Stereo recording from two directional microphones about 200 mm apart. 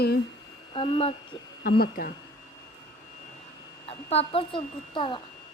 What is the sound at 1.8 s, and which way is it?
Speech, 45° left (ahead or behind).